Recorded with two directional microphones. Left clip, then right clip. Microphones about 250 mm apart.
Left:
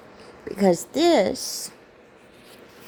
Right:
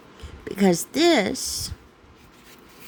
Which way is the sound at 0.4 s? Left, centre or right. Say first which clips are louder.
Left 1 dB; right.